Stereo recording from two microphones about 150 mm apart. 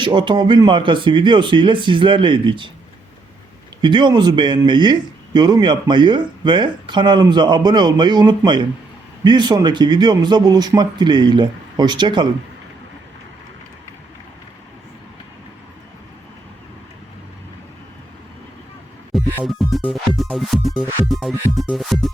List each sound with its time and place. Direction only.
0.0 s a man's voice: 30° right (ahead or behind)
3.8 s speech: 30° right (ahead or behind)
19.5 s music: centre (ahead or behind)